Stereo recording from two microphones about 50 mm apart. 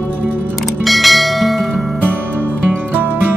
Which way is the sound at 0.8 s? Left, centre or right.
Centre.